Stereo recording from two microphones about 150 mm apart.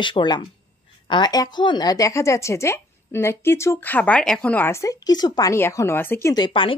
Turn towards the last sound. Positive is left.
turn(degrees=35)  # may be behind; listen again after turning